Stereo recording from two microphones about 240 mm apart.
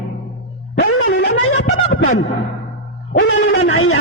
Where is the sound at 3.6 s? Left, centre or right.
Left.